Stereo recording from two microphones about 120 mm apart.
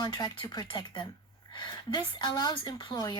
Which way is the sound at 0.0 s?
35° left (ahead or behind).